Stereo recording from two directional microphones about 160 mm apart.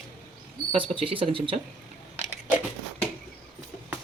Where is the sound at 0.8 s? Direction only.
35° right (ahead or behind).